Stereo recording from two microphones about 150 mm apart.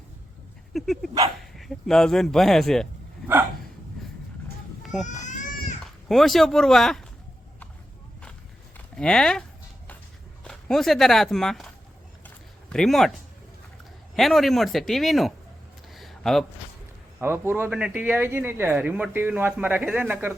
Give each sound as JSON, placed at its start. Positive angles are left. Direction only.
{"t": 0.7, "sound": "speech", "side_deg": 0}
{"t": 4.8, "sound": "a sound", "side_deg": 0}
{"t": 5.0, "sound": "baby cry", "side_deg": 55}
{"t": 5.8, "sound": "speech", "side_deg": 0}
{"t": 9.0, "sound": "speech", "side_deg": 5}
{"t": 10.4, "sound": "speech", "side_deg": 0}
{"t": 12.7, "sound": "speech", "side_deg": 0}
{"t": 14.2, "sound": "speech", "side_deg": 0}
{"t": 15.9, "sound": "a sound", "side_deg": 0}
{"t": 17.2, "sound": "speech", "side_deg": -15}